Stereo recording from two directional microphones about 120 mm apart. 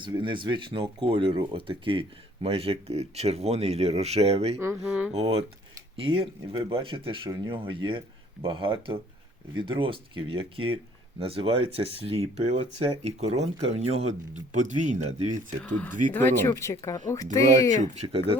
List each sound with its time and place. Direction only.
0.0 s speech: 40° right (ahead or behind); by 4.5 s 60° right (ahead or behind)
4.6 s speech: 20° right (ahead or behind)
5.1 s speech: 55° right (ahead or behind)
16.1 s speech: 15° left (ahead or behind)
18.0 s speech: 55° right (ahead or behind)